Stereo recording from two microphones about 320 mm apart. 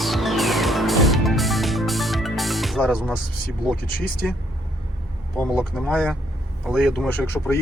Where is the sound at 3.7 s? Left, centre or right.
Left.